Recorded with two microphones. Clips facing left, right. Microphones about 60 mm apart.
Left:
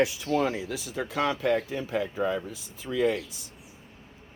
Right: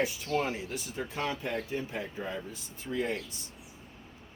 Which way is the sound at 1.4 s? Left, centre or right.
Left.